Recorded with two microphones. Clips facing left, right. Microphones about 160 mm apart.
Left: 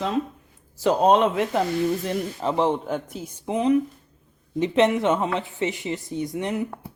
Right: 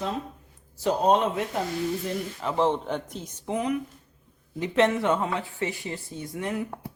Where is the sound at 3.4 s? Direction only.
20° left (ahead or behind).